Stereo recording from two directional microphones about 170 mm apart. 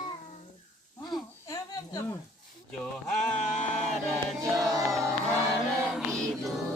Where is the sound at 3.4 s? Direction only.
45° left (ahead or behind).